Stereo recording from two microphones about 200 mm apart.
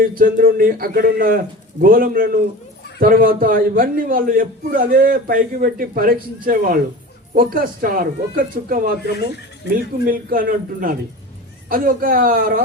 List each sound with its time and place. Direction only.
0.0 s a man's voice: 45° right (ahead or behind)
10.1 s a man's voice: 45° right (ahead or behind)